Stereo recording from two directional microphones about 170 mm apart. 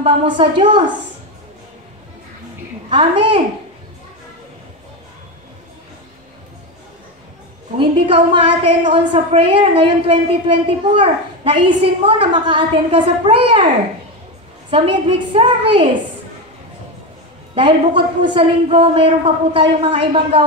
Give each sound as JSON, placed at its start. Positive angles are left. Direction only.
{"t": 0.0, "sound": "a woman's voice", "side_deg": -30}
{"t": 2.9, "sound": "a woman's voice", "side_deg": -30}
{"t": 7.8, "sound": "a woman's voice", "side_deg": -30}
{"t": 14.7, "sound": "a woman's voice", "side_deg": -30}
{"t": 17.6, "sound": "a woman's voice", "side_deg": -30}